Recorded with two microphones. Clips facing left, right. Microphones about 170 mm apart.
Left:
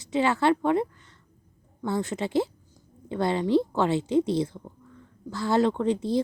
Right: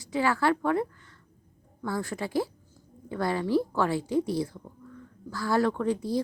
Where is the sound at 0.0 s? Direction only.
20° left (ahead or behind).